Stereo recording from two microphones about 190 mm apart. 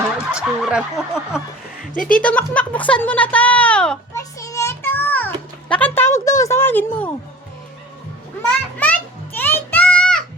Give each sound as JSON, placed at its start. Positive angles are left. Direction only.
{"t": 0.3, "sound": "snicker", "side_deg": -5}
{"t": 1.8, "sound": "speech", "side_deg": 45}
{"t": 2.2, "sound": "speech", "side_deg": 5}
{"t": 4.2, "sound": "a sound", "side_deg": 15}
{"t": 8.4, "sound": "music", "side_deg": 10}